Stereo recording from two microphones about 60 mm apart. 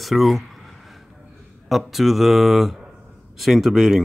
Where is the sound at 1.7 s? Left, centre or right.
Centre.